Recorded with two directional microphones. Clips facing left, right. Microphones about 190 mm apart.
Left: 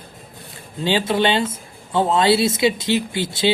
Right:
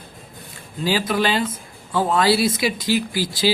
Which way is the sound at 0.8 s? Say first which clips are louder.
Left 2 dB; 25° left (ahead or behind).